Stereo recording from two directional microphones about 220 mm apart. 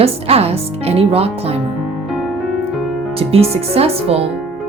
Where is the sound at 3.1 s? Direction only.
25° right (ahead or behind).